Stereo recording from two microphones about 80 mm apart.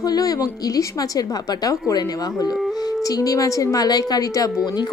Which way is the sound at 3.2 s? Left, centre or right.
Left.